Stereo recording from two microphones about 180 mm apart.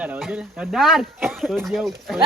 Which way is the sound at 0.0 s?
5° right (ahead or behind).